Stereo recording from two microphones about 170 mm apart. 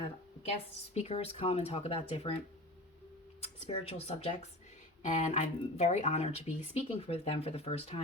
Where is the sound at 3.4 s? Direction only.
35° left (ahead or behind).